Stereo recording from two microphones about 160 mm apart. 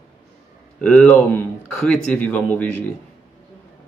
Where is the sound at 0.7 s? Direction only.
5° left (ahead or behind).